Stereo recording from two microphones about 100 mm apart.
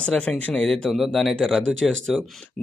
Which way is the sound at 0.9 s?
5° right (ahead or behind).